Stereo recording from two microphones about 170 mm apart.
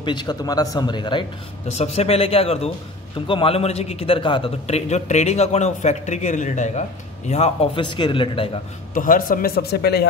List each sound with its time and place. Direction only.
0.0 s a man's voice: 25° left (ahead or behind)
8.9 s speech: 55° left (ahead or behind); by 10.0 s 70° left (ahead or behind)